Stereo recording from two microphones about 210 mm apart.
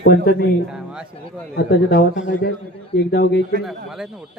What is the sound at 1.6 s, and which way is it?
A man's voice, 50° left (ahead or behind).